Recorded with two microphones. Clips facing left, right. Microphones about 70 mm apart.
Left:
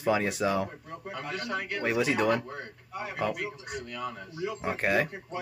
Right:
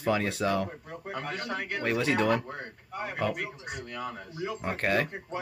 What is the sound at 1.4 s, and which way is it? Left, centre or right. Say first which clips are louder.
Speech: left 1 dB; centre.